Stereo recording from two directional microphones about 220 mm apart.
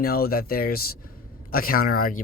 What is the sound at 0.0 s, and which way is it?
Speech, 45° left (ahead or behind).